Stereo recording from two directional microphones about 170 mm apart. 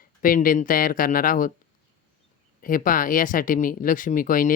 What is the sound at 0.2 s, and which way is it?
Speech, 55° left (ahead or behind).